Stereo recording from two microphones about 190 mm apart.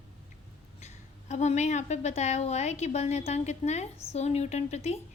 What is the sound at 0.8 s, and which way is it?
A woman's voice, 35° left (ahead or behind).